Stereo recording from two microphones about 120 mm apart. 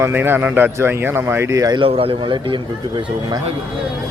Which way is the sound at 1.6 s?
35° right (ahead or behind).